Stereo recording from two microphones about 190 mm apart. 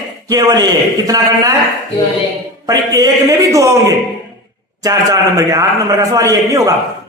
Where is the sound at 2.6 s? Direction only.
20° right (ahead or behind).